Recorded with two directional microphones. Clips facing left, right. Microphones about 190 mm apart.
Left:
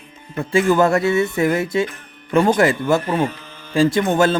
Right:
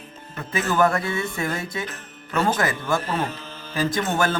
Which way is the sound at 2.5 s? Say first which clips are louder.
Left 8 dB; 25° left (ahead or behind).